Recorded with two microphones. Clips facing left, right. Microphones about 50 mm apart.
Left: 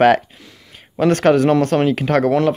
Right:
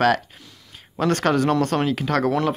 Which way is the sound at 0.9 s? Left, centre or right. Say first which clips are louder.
Left 6 dB; centre.